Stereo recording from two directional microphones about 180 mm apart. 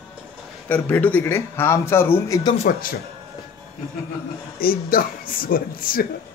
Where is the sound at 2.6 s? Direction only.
50° left (ahead or behind).